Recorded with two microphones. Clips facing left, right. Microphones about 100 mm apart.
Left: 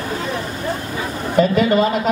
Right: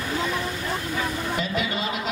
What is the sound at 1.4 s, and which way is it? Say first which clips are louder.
Speech: left 17 dB; 45° left (ahead or behind).